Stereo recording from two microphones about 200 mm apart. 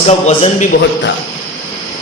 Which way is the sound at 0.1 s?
35° left (ahead or behind).